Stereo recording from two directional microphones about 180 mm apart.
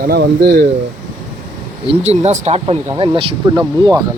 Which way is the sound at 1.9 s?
35° right (ahead or behind).